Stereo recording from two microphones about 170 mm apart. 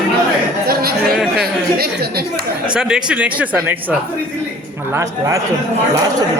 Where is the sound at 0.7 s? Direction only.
65° right (ahead or behind).